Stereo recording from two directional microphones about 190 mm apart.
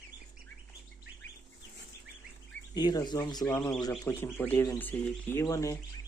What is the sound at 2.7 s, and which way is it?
Speech, 20° left (ahead or behind).